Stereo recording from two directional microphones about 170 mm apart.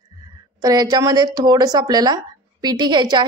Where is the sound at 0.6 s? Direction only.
20° right (ahead or behind).